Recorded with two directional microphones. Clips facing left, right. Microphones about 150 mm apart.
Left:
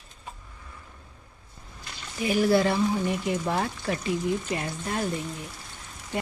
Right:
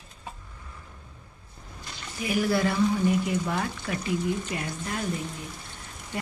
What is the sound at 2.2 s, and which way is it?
A woman's voice, 25° left (ahead or behind).